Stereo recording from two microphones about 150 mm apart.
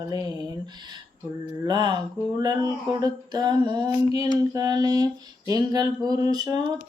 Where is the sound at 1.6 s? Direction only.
30° right (ahead or behind).